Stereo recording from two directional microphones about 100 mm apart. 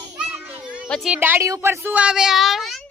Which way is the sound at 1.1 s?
20° right (ahead or behind).